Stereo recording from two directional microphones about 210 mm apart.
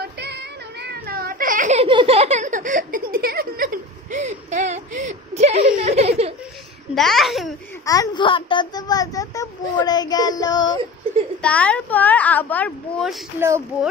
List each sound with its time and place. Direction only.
0.0 s a sound: 50° right (ahead or behind); by 6.3 s 30° right (ahead or behind)
7.0 s a child's voice: centre (ahead or behind)
7.8 s a child's voice: 15° left (ahead or behind)
11.4 s a woman's voice: 5° left (ahead or behind)